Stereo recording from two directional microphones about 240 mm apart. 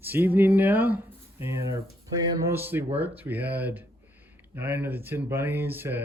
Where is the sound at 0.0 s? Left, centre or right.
Centre.